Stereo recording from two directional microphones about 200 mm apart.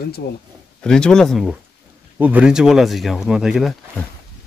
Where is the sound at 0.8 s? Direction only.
5° left (ahead or behind).